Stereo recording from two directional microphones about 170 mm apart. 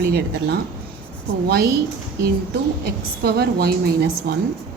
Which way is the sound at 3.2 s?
65° right (ahead or behind).